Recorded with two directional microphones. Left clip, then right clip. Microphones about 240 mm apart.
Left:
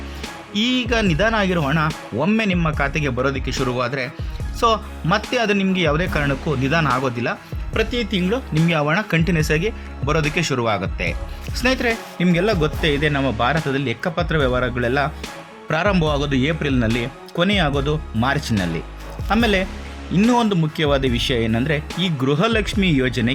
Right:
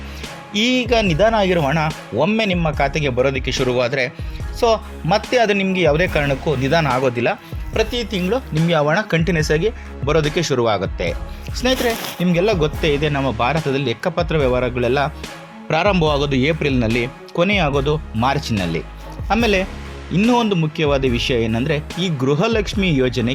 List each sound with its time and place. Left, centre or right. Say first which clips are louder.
0.5 s speech: right 3 dB; centre